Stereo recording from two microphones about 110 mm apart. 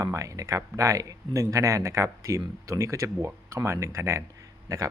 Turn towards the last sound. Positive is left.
turn(degrees=-30)  # may be behind; listen again after turning